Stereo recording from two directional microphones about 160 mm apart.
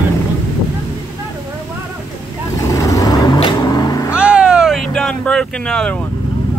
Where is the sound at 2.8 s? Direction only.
20° left (ahead or behind).